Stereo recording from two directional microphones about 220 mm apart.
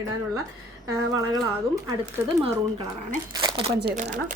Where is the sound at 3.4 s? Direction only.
15° right (ahead or behind).